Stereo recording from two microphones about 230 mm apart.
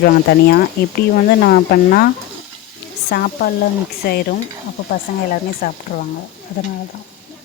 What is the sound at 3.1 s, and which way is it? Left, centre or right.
Speech, left.